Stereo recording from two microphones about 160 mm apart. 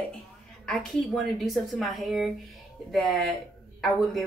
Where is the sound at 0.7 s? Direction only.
5° left (ahead or behind).